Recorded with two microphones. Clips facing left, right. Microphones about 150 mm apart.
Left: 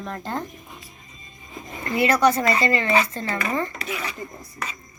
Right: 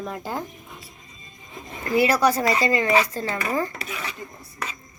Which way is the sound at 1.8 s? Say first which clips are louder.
Even; 5° right (ahead or behind).